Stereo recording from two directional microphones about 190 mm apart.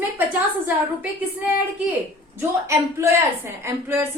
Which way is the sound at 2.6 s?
15° right (ahead or behind).